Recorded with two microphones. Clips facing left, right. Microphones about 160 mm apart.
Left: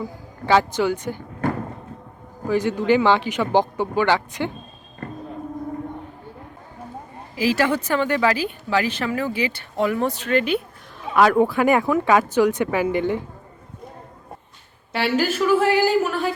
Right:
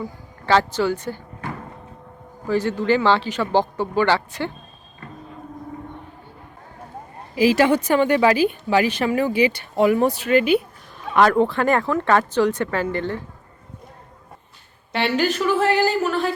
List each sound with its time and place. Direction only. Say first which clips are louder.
0.4 s speech: even; 15° left (ahead or behind)
2.5 s speech: left 1 dB; 15° left (ahead or behind)
7.3 s a woman's voice: right 4 dB; 15° right (ahead or behind)
11.0 s speech: even; 5° left (ahead or behind)
14.9 s speech: even; 5° left (ahead or behind)